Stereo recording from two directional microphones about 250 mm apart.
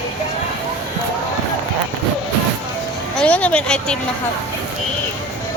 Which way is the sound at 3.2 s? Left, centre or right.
Centre.